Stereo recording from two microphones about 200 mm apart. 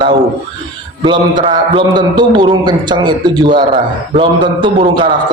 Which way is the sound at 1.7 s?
20° right (ahead or behind).